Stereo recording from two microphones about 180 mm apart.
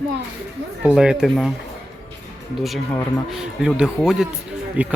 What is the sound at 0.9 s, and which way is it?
Speech, 5° right (ahead or behind).